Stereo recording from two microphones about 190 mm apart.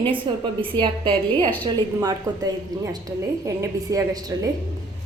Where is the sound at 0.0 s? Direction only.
25° right (ahead or behind).